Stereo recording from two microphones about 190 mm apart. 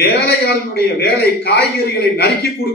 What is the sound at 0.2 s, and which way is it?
A man's voice, 55° left (ahead or behind).